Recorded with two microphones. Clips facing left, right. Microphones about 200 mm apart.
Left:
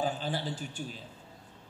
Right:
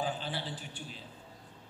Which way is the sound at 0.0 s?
45° left (ahead or behind).